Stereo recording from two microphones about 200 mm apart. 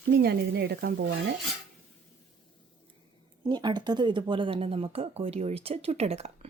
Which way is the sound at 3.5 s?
20° right (ahead or behind).